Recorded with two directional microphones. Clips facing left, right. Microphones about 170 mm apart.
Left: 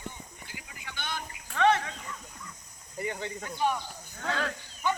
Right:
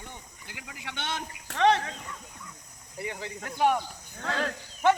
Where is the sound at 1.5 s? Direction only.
35° right (ahead or behind).